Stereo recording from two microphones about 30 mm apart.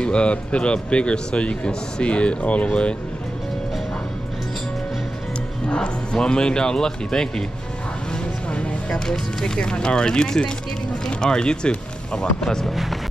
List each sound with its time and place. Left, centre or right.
0.0 s speech: left
5.8 s speech: left
8.5 s music: left
9.0 s speech: centre